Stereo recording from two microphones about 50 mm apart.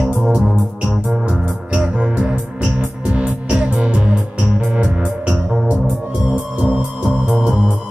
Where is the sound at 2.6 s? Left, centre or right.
Right.